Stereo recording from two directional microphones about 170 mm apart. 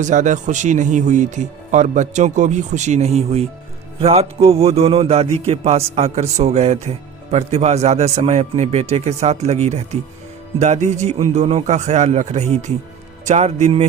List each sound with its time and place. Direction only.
0.0 s speech: 45° right (ahead or behind)